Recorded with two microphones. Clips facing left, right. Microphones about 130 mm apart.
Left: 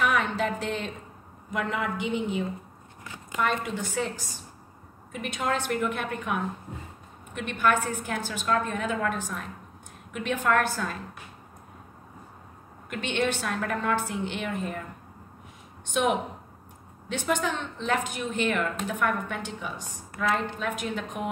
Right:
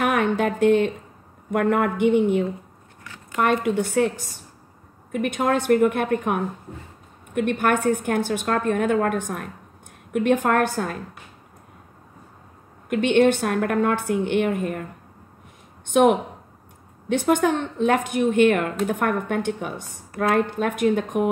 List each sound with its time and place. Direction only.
0.0 s a sound: 55° right (ahead or behind)
1.5 s a woman's voice: 55° right (ahead or behind)
3.0 s a sound: 20° left (ahead or behind)
3.3 s a woman's voice: 55° right (ahead or behind)
12.9 s a woman's voice: 50° right (ahead or behind)
15.9 s a woman's voice: 55° right (ahead or behind)